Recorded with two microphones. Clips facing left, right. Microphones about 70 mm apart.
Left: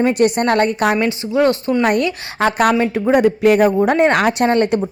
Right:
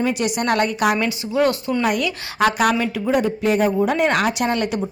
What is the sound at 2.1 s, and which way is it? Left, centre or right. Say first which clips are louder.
Speech: left 1 dB; left.